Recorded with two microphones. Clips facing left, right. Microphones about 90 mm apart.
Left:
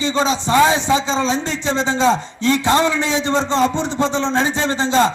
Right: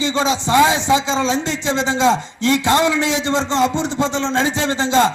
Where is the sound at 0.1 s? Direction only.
35° left (ahead or behind).